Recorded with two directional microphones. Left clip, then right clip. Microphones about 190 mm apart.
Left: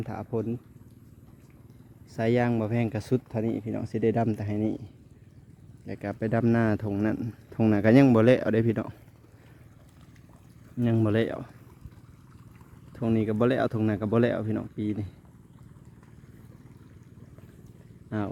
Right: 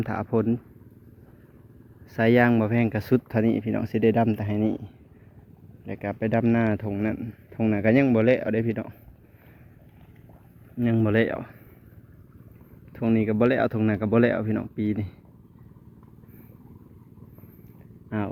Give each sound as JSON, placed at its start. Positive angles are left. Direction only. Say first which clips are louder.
{"t": 0.0, "sound": "speech", "louder": "right 6 dB", "side_deg": 5}
{"t": 2.1, "sound": "speech", "louder": "right 6 dB", "side_deg": 10}
{"t": 10.8, "sound": "speech", "louder": "right 3 dB", "side_deg": 35}
{"t": 12.9, "sound": "speech", "louder": "right 3 dB", "side_deg": 30}
{"t": 18.1, "sound": "speech", "louder": "right 2 dB", "side_deg": 30}